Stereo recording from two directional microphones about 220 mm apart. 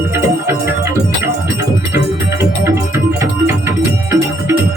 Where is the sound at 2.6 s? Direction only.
10° right (ahead or behind).